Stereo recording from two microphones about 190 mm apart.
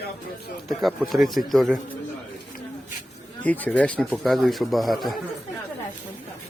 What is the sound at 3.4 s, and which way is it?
Speech, 10° left (ahead or behind).